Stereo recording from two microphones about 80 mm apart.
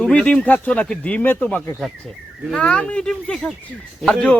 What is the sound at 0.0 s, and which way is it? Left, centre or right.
Speech, centre.